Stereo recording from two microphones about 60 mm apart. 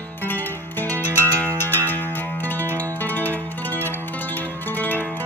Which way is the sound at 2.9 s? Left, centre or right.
Left.